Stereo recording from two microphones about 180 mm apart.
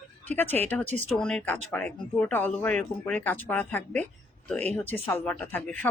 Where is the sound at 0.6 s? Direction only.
10° left (ahead or behind).